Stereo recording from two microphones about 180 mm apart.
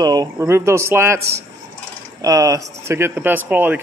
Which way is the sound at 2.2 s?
20° right (ahead or behind).